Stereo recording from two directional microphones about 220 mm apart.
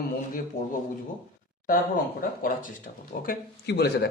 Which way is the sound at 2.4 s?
40° left (ahead or behind).